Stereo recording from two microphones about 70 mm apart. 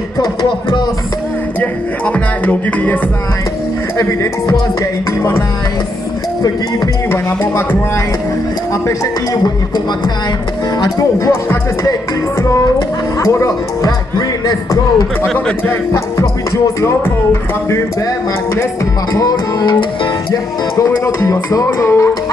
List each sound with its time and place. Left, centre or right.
0.2 s speech: left
1.6 s music: left
4.0 s music: left
11.0 s music: left
13.8 s speech: left
15.3 s music: left
16.8 s music: left
19.1 s music: left
20.7 s music: left